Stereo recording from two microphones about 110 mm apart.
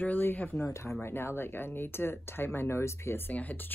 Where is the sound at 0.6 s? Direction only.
25° left (ahead or behind).